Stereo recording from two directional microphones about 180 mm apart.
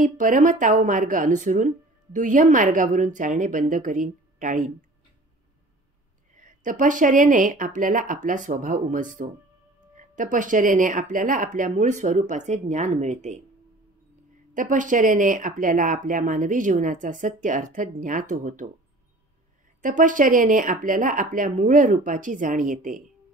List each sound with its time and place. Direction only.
0.0 s speech: 45° right (ahead or behind)
6.3 s speech: 45° right (ahead or behind)
14.5 s speech: 45° right (ahead or behind)
19.8 s speech: 45° right (ahead or behind)